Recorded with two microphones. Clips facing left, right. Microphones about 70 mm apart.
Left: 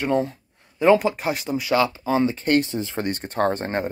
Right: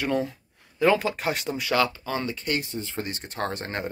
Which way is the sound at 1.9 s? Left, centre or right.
Centre.